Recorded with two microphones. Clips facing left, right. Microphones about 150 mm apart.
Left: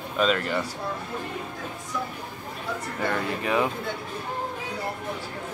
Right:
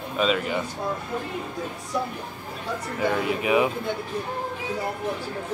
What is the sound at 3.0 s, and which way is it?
Speech, 10° right (ahead or behind).